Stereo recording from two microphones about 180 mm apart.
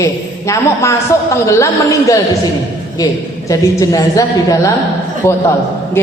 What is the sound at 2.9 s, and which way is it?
A woman's voice, 20° left (ahead or behind).